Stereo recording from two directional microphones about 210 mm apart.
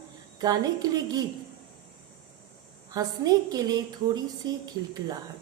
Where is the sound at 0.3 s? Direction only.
20° right (ahead or behind).